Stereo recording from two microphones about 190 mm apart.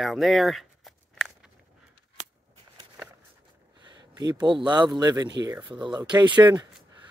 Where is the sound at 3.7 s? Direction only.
25° right (ahead or behind).